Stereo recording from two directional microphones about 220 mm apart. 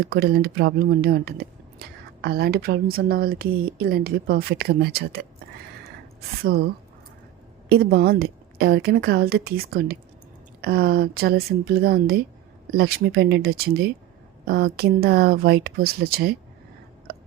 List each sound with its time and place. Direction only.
0.0 s speech: 45° right (ahead or behind)
7.7 s speech: 45° right (ahead or behind)